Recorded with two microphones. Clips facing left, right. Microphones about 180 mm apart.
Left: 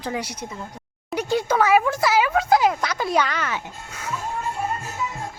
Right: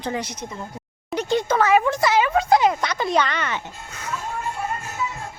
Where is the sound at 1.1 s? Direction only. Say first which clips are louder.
Right 1 dB; 5° left (ahead or behind).